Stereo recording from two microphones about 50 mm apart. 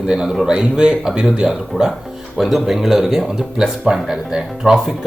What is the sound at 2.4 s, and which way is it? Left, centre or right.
Speech, centre.